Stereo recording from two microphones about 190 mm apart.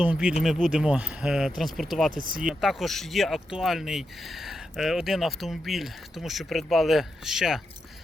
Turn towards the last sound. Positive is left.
turn(degrees=0)  # may be behind; listen again after turning